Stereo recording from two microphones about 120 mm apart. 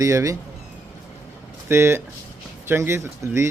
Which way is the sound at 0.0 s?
25° right (ahead or behind).